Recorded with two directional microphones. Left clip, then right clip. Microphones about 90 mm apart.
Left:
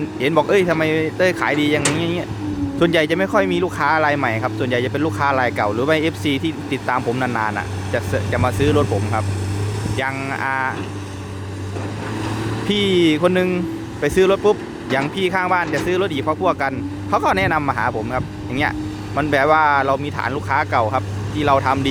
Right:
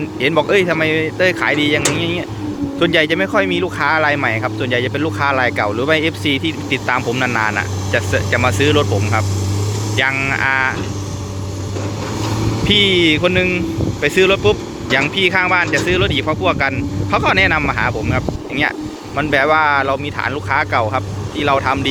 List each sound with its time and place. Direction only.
0.2 s speech: 45° left (ahead or behind)
10.1 s speech: 25° left (ahead or behind)
12.6 s speech: 55° left (ahead or behind)
14.0 s speech: 50° left (ahead or behind)